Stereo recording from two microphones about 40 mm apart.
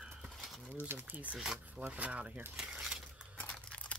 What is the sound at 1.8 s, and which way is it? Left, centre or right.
Speech, right.